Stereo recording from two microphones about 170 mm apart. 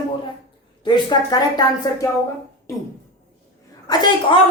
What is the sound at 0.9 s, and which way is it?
Speech, 25° left (ahead or behind).